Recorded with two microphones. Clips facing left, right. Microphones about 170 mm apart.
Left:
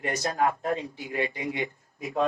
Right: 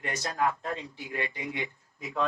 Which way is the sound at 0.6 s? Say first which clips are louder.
Left 6 dB; 15° left (ahead or behind).